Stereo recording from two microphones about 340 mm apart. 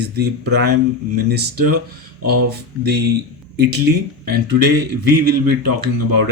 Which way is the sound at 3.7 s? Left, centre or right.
Right.